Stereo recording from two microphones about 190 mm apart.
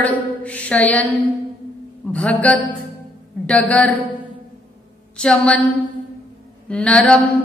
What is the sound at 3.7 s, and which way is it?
Mantra, 5° left (ahead or behind).